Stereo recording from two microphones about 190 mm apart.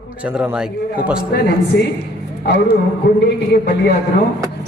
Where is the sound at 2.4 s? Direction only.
60° left (ahead or behind).